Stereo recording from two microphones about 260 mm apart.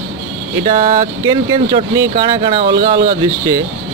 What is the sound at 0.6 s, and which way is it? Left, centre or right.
Speech, centre.